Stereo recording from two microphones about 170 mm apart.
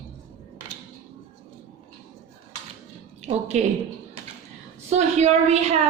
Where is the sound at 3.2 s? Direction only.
40° right (ahead or behind).